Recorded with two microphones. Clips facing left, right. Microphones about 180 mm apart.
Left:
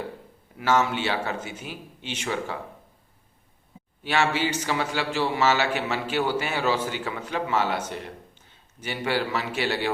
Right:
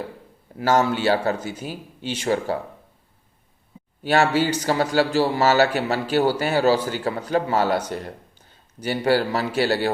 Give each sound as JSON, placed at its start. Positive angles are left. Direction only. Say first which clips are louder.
{"t": 0.6, "sound": "a man's voice", "louder": "right 4 dB", "side_deg": -35}
{"t": 4.0, "sound": "a man's voice", "louder": "right 5 dB", "side_deg": -40}